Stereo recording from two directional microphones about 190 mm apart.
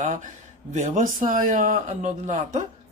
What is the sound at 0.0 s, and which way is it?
Speech, 40° right (ahead or behind).